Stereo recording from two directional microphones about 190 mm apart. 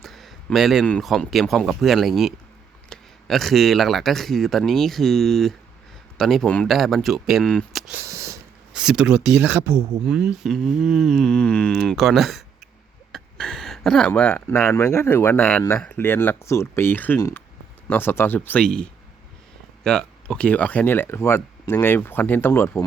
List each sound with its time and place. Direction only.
0.0 s speech: centre (ahead or behind)
8.0 s a sound: 15° right (ahead or behind)
8.7 s speech: 5° right (ahead or behind)